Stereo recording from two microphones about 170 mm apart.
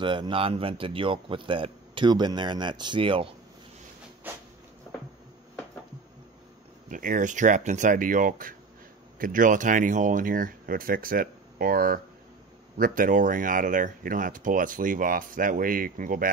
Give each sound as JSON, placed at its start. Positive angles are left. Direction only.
{"t": 0.0, "sound": "speech", "side_deg": -30}
{"t": 4.2, "sound": "a sound", "side_deg": -10}
{"t": 6.9, "sound": "speech", "side_deg": -50}